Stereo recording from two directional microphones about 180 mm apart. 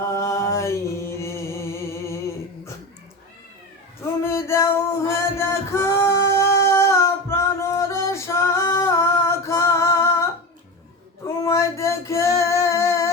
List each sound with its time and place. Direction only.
0.1 s chant: 15° left (ahead or behind)
4.2 s music: 15° left (ahead or behind)
11.4 s singing: 15° left (ahead or behind)